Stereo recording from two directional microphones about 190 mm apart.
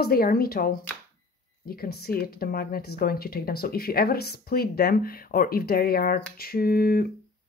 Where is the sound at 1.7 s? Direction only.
55° left (ahead or behind).